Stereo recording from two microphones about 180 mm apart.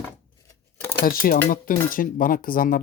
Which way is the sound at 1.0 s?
50° left (ahead or behind).